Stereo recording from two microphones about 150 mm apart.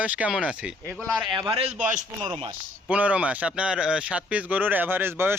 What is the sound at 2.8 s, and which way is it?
Speech, 10° right (ahead or behind).